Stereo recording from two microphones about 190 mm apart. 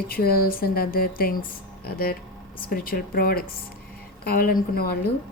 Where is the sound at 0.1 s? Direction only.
50° left (ahead or behind).